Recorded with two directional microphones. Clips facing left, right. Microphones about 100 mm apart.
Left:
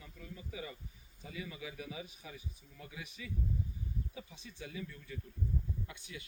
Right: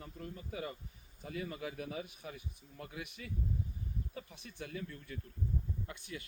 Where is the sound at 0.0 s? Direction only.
50° right (ahead or behind).